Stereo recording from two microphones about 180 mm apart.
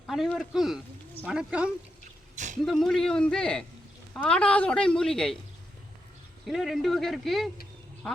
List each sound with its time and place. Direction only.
0.1 s a woman's voice: centre (ahead or behind)
2.3 s a sound: 45° right (ahead or behind)
2.6 s a woman's voice: centre (ahead or behind)
6.5 s a woman's voice: centre (ahead or behind)